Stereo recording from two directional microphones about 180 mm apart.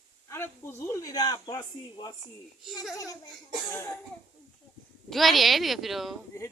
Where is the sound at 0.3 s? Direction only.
15° left (ahead or behind).